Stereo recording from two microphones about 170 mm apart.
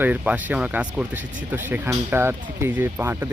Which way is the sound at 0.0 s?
10° right (ahead or behind).